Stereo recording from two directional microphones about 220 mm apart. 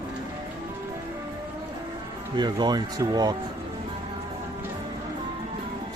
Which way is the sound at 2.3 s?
20° right (ahead or behind).